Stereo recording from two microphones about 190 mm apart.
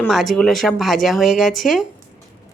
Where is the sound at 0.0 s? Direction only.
Centre (ahead or behind).